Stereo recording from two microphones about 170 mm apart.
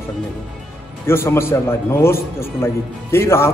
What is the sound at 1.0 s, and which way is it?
A man's voice, 15° left (ahead or behind).